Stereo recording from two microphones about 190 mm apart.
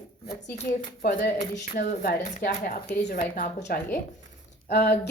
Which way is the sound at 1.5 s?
55° left (ahead or behind).